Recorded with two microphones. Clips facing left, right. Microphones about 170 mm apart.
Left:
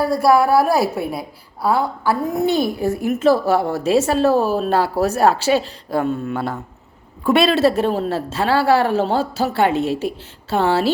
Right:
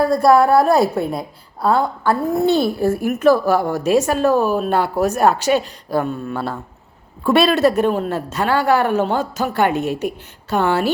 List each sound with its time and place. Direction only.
0.0 s a woman's voice: 5° left (ahead or behind); by 10.9 s 30° left (ahead or behind)